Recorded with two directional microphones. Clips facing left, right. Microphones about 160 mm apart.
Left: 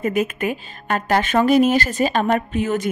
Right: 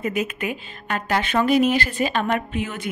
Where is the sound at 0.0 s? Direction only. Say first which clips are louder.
Left 4 dB; 50° left (ahead or behind).